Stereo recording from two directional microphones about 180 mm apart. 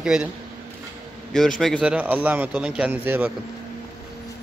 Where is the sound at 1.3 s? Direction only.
Centre (ahead or behind).